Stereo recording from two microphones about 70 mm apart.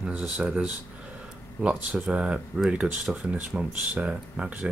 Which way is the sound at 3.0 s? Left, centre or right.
Centre.